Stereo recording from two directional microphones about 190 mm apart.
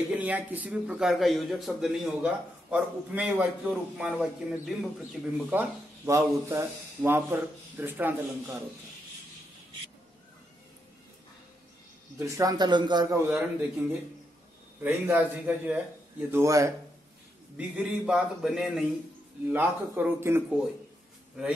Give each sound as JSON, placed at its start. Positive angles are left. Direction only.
{"t": 0.1, "sound": "a man's voice", "side_deg": -10}
{"t": 12.2, "sound": "a man's voice", "side_deg": -20}
{"t": 14.8, "sound": "a man's voice", "side_deg": -10}
{"t": 17.6, "sound": "a man's voice", "side_deg": -5}